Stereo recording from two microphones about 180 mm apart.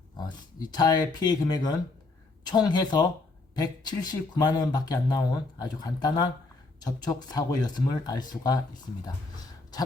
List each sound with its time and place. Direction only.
0.2 s speech: 25° left (ahead or behind)